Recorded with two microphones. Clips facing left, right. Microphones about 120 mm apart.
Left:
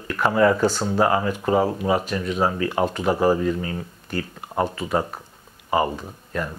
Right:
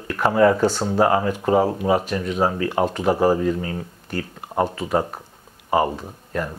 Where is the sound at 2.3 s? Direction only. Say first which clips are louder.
Right 1 dB; 30° right (ahead or behind).